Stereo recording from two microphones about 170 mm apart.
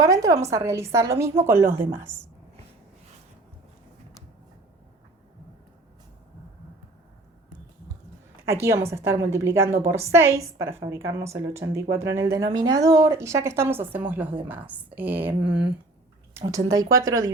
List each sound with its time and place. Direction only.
0.0 s speech: 20° right (ahead or behind)
8.6 s speech: 15° right (ahead or behind)
16.5 s speech: 20° right (ahead or behind)